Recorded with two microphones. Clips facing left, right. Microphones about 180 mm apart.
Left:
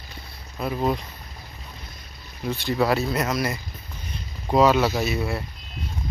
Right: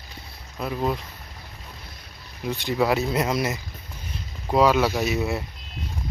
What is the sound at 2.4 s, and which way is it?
Speech, 15° right (ahead or behind).